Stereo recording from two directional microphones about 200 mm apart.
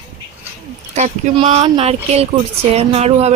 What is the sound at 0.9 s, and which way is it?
Speech, 35° right (ahead or behind).